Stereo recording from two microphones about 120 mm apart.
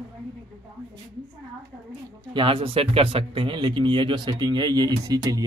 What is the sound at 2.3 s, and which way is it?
A man's voice, 45° right (ahead or behind).